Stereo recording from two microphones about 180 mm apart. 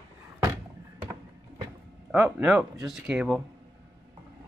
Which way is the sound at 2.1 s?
5° right (ahead or behind).